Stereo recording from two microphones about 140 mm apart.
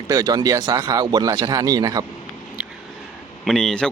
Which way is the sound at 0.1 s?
25° right (ahead or behind).